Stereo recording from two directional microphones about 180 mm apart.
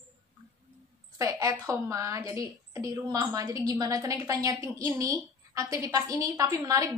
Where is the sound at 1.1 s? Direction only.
15° right (ahead or behind).